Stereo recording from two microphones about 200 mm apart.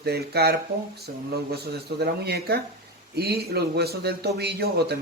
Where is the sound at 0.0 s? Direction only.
50° right (ahead or behind).